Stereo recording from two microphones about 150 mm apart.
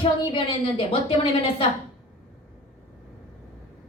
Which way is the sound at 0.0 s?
35° left (ahead or behind).